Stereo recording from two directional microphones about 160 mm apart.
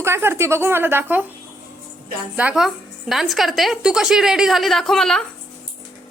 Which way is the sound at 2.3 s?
5° right (ahead or behind).